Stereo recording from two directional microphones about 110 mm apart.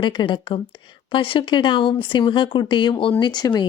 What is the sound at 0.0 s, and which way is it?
Speech, 45° left (ahead or behind).